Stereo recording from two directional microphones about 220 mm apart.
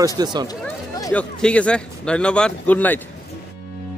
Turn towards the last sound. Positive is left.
turn(degrees=5)  # may be behind; listen again after turning